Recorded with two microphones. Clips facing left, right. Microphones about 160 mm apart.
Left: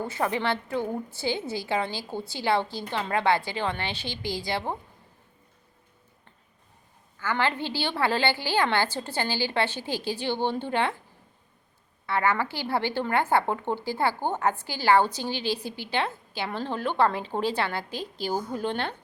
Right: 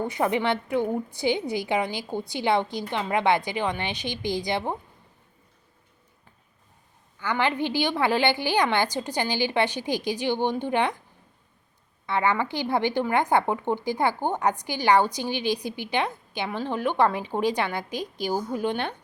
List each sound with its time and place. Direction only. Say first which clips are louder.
0.0 s a woman's voice: right 3 dB; 20° right (ahead or behind)
7.2 s a woman's voice: right 2 dB; 15° right (ahead or behind)
12.0 s a woman's voice: right 1 dB; 20° right (ahead or behind)